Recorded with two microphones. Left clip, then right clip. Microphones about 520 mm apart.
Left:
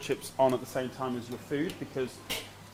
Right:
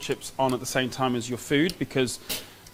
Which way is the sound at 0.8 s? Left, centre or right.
Right.